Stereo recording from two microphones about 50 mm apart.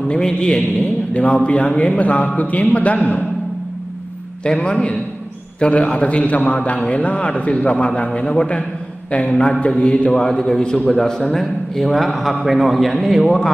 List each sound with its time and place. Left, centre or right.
0.3 s a man's voice: centre
4.4 s a man's voice: left; by 13.4 s centre